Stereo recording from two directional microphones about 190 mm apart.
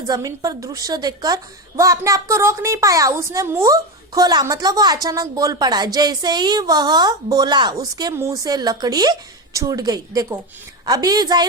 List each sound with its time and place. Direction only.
0.1 s a woman's voice: 20° right (ahead or behind)